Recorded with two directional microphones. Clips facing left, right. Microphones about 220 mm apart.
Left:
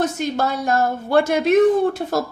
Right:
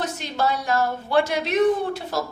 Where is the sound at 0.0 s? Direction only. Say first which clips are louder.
Left 5 dB; 50° left (ahead or behind).